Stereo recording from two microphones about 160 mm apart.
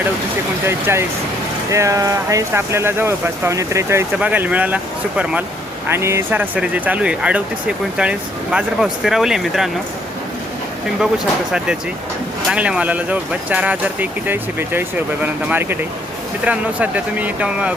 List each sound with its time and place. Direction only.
0.6 s speech: 15° right (ahead or behind)
12.5 s speech: 5° right (ahead or behind)